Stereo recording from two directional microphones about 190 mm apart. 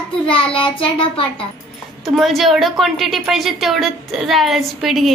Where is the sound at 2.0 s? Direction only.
Centre (ahead or behind).